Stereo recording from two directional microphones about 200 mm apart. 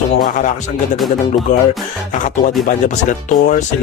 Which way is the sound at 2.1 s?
40° left (ahead or behind).